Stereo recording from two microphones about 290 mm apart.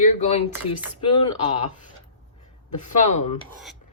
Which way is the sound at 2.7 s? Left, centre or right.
Left.